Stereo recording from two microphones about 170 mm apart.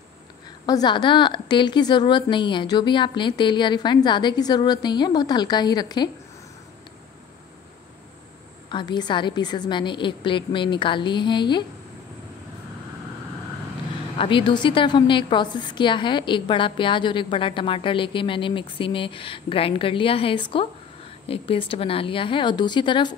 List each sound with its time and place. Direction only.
0.7 s a woman's voice: 25° left (ahead or behind)
8.6 s a woman's voice: 25° left (ahead or behind)
14.1 s a woman's voice: 30° left (ahead or behind)